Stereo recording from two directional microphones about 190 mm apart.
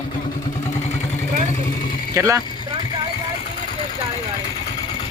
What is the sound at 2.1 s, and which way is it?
Speech, 15° right (ahead or behind).